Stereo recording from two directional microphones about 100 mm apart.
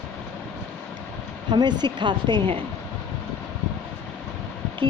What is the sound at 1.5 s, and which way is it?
Speech, 45° right (ahead or behind).